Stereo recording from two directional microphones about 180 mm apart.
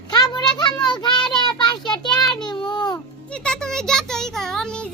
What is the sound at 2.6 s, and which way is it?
Music, 25° left (ahead or behind).